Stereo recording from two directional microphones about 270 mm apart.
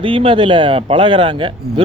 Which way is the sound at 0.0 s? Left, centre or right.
Centre.